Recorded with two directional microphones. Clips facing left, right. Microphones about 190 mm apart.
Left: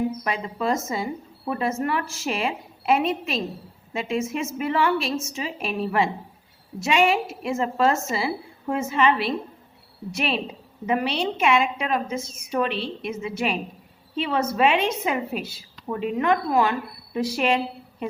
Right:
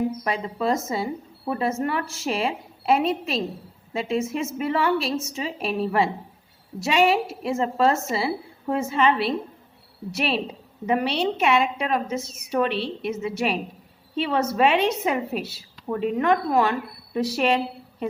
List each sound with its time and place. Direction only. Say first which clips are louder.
0.3 s speech: right 1 dB; 35° right (ahead or behind)